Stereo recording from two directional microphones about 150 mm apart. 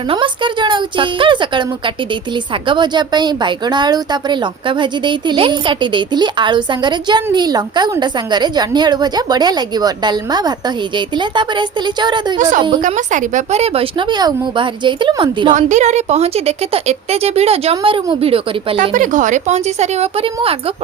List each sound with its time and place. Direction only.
0.1 s speech: 35° right (ahead or behind)
2.6 s a woman's voice: 30° right (ahead or behind)
12.4 s speech: 60° right (ahead or behind)
14.1 s speech: 30° right (ahead or behind)
15.5 s speech: 50° right (ahead or behind)
18.8 s speech: 60° right (ahead or behind); by 20.6 s 40° right (ahead or behind)